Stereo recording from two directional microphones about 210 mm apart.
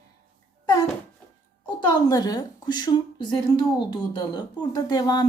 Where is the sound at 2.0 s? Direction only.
20° left (ahead or behind).